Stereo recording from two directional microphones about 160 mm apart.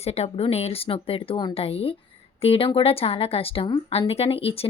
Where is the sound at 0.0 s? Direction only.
40° left (ahead or behind).